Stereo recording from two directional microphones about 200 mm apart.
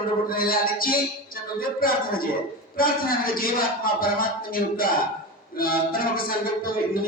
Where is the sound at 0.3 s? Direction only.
45° left (ahead or behind).